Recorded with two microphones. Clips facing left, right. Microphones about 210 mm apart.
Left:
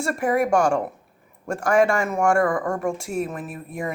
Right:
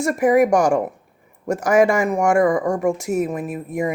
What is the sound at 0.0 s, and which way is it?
A woman's voice, 20° right (ahead or behind).